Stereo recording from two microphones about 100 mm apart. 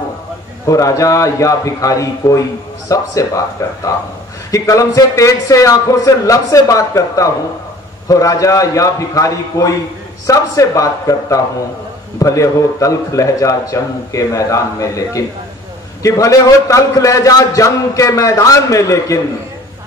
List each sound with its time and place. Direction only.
0.7 s a man's voice: 35° left (ahead or behind)